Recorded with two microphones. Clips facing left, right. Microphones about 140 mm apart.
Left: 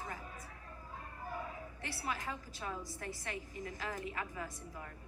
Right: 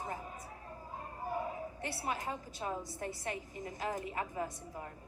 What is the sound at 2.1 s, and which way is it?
A woman's voice, 25° right (ahead or behind).